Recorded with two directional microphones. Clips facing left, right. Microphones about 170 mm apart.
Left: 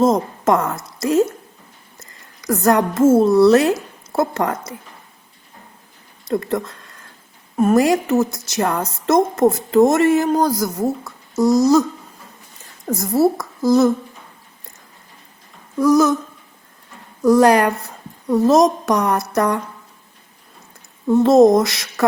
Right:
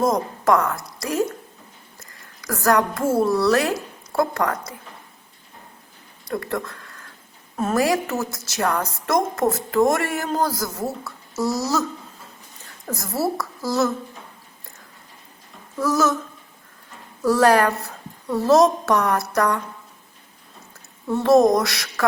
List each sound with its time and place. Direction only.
0.0 s a woman's voice: 25° left (ahead or behind)
6.2 s a woman's voice: 20° left (ahead or behind)
15.8 s a woman's voice: 15° left (ahead or behind)
17.2 s a woman's voice: 15° left (ahead or behind)
21.1 s a woman's voice: 20° left (ahead or behind)